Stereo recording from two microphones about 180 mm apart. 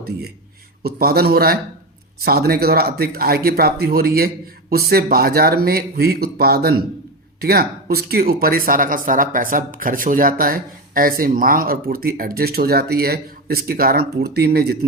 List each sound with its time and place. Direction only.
0.8 s speech: 55° right (ahead or behind)